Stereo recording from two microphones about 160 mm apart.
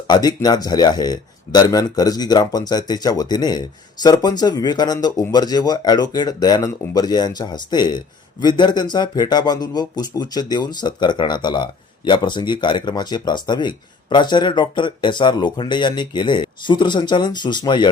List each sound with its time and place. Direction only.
0.1 s a man's voice: 25° left (ahead or behind)